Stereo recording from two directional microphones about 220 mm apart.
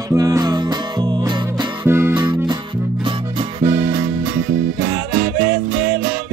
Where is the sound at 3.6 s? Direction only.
10° right (ahead or behind).